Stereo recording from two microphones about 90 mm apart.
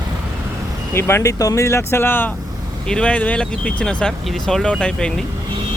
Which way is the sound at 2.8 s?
10° left (ahead or behind).